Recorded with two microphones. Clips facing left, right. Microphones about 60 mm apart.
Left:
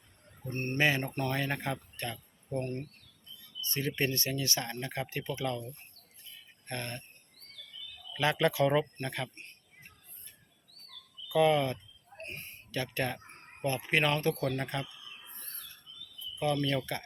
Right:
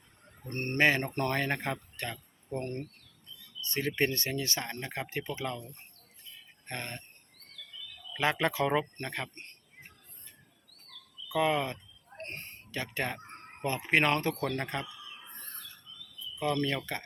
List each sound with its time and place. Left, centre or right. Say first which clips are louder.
0.5 s speech: right 2 dB; right
3.7 s speech: right 2 dB; right
6.7 s speech: left 1 dB; right
8.1 s speech: left 1 dB; right
11.3 s speech: left 3 dB; right
12.1 s a sound: right 2 dB; right
12.7 s speech: left 1 dB; right
16.4 s speech: even; right
16.6 s speech: left 1 dB; right